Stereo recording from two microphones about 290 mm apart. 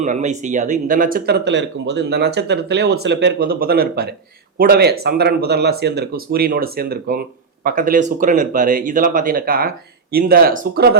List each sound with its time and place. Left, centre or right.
0.0 s speech: right